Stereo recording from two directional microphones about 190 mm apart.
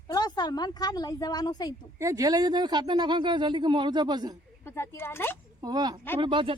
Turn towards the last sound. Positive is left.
turn(degrees=-25)  # may be behind; listen again after turning